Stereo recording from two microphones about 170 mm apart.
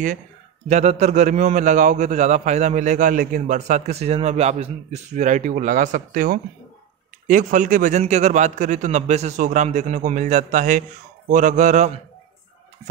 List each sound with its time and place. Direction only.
0.7 s a man's voice: 40° right (ahead or behind)